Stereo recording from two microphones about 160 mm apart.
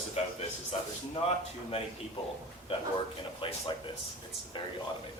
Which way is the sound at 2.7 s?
35° left (ahead or behind).